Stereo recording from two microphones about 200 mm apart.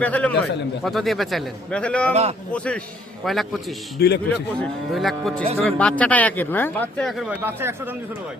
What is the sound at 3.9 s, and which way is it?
Speech, 55° left (ahead or behind).